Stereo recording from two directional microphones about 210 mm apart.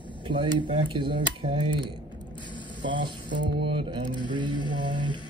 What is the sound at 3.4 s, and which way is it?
Speech, 25° right (ahead or behind).